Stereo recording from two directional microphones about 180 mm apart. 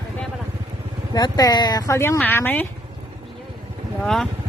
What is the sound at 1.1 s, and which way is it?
Speech, 20° left (ahead or behind).